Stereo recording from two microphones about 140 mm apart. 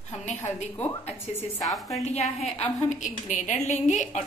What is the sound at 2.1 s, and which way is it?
A woman's voice, 50° left (ahead or behind).